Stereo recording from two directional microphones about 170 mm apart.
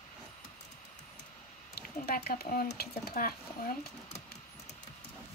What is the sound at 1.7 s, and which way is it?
Speech, 65° left (ahead or behind).